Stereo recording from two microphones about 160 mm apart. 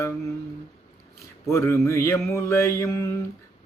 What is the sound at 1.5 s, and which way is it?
Mantra, 20° left (ahead or behind).